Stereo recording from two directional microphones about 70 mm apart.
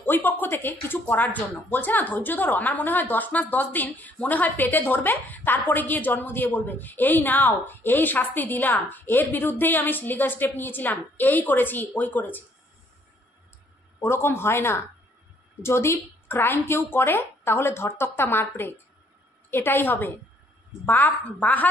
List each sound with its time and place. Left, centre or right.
0.0 s speech: left
13.9 s speech: left